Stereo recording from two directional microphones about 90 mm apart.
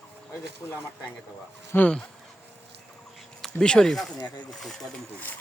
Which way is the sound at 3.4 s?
10° left (ahead or behind).